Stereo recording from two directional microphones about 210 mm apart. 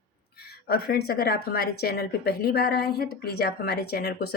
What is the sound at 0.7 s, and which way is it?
Speech, 45° left (ahead or behind).